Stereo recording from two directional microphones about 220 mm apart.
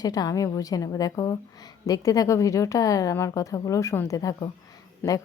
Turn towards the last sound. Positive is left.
turn(degrees=10)  # may be behind; listen again after turning